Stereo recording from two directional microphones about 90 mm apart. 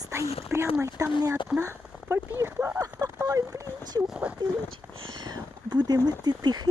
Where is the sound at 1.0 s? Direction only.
40° right (ahead or behind).